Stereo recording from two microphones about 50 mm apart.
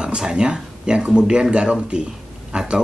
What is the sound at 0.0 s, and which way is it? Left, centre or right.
Speech, centre.